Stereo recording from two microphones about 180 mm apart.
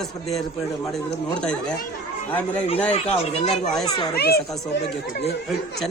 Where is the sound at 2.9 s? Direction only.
35° left (ahead or behind).